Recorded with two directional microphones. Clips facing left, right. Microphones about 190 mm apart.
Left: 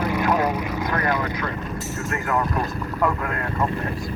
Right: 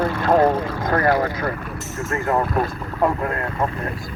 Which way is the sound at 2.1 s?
30° right (ahead or behind).